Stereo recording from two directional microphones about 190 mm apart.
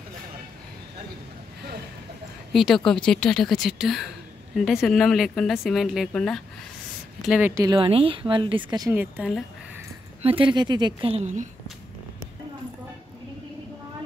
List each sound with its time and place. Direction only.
2.5 s speech: centre (ahead or behind)
7.2 s speech: 10° right (ahead or behind)
8.9 s speech: 10° right (ahead or behind)
10.2 s speech: 25° right (ahead or behind)